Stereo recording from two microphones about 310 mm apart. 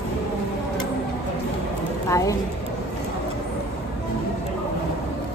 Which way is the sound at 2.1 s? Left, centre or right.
Centre.